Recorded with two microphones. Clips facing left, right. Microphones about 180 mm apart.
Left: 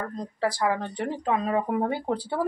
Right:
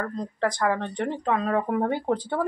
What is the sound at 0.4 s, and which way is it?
Speech, 5° left (ahead or behind).